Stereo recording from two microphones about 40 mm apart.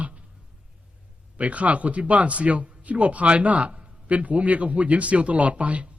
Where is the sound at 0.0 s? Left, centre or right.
Right.